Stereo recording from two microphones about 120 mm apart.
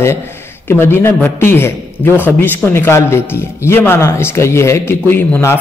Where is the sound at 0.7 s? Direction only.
20° left (ahead or behind).